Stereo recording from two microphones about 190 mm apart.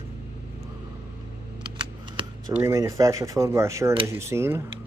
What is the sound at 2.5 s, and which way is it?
Speech, 15° right (ahead or behind).